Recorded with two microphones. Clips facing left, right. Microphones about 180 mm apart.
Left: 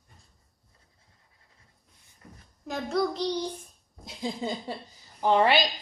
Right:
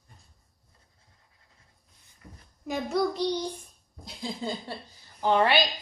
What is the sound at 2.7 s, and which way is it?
Speech, centre (ahead or behind).